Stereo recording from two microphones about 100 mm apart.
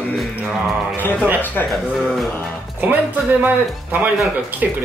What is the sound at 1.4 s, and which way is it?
Speech, 15° left (ahead or behind).